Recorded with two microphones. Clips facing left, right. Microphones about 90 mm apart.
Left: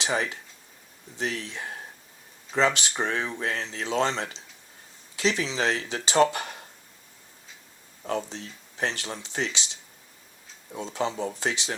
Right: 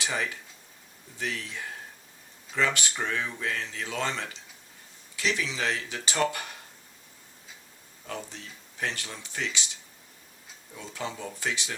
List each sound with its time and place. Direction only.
0.0 s speech: 25° left (ahead or behind)
8.0 s speech: 35° left (ahead or behind)
10.7 s speech: 30° left (ahead or behind)